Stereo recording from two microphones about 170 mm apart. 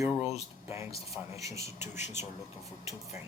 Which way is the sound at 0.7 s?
15° right (ahead or behind).